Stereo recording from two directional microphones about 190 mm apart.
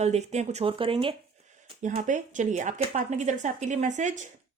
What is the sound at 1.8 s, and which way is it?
A woman's voice, 40° right (ahead or behind).